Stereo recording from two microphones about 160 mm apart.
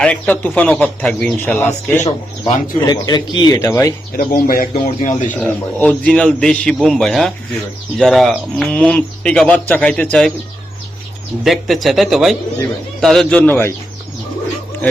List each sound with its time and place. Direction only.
0.0 s speech: 10° left (ahead or behind)
2.4 s speech: 25° left (ahead or behind)
4.2 s speech: 65° left (ahead or behind)
5.3 s speech: 10° left (ahead or behind)
11.4 s speech: centre (ahead or behind)